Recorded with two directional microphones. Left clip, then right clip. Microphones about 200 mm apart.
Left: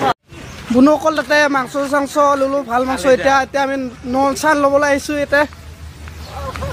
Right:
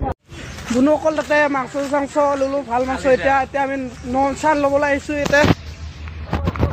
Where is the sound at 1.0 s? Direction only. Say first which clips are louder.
Left 3 dB; 25° left (ahead or behind).